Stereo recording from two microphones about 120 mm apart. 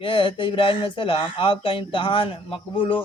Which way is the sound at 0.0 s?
45° left (ahead or behind).